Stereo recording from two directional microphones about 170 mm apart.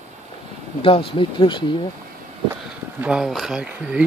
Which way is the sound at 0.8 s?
30° left (ahead or behind).